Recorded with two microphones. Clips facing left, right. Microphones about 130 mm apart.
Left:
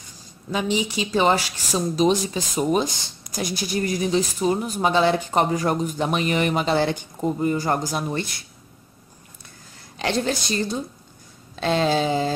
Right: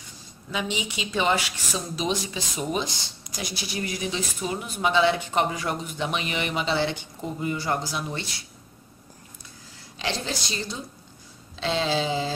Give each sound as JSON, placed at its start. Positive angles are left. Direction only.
{"t": 0.5, "sound": "speech", "side_deg": 40}
{"t": 9.9, "sound": "speech", "side_deg": 50}